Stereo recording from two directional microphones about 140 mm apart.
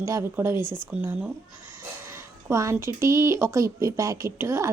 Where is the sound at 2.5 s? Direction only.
20° right (ahead or behind).